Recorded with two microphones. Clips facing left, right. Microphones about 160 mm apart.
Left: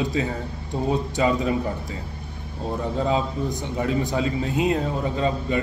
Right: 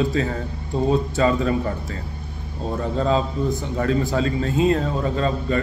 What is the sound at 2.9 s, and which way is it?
A man's voice, 10° left (ahead or behind).